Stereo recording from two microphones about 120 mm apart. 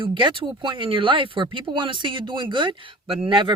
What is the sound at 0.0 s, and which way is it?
Speech, 45° right (ahead or behind).